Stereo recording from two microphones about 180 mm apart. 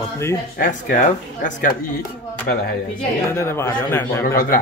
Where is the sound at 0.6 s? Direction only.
50° left (ahead or behind).